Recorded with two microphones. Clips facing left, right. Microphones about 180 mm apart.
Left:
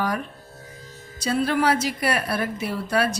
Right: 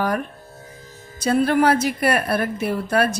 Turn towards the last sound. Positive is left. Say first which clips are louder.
# right 3 dB
turn(degrees=-55)  # may be behind; listen again after turning